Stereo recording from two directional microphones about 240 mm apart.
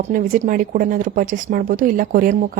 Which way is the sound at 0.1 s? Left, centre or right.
Right.